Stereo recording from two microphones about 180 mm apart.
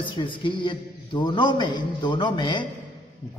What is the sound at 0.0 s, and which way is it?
A man's voice, 25° left (ahead or behind).